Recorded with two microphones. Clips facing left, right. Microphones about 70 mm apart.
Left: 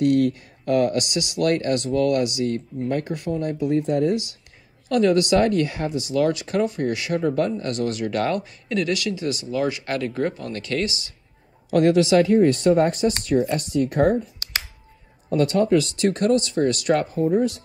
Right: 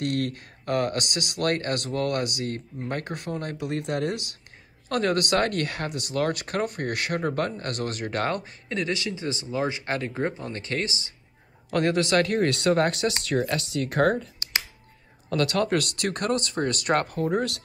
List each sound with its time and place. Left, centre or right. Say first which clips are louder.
0.0 s speech: left 9 dB; right
11.7 s speech: left 6 dB; right
15.3 s speech: left 5 dB; right